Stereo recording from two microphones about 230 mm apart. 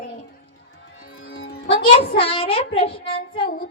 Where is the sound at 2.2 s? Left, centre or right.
Left.